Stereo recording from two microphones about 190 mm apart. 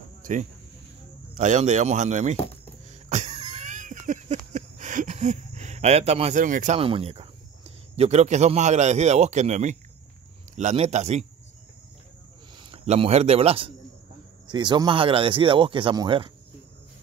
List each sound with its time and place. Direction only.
0.2 s insect: 40° right (ahead or behind)
1.3 s speech: 40° right (ahead or behind)
2.9 s a sound: 40° right (ahead or behind)
6.8 s speech: 30° right (ahead or behind)
12.5 s speech: 30° right (ahead or behind)